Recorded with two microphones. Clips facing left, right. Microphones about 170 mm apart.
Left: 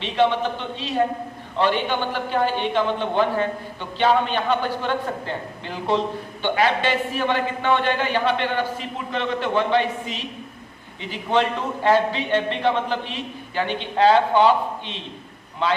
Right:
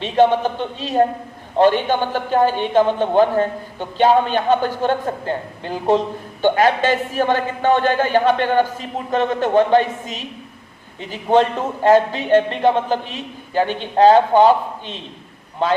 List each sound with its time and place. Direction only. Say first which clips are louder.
0.0 s a man's voice: right 5 dB; 45° right (ahead or behind)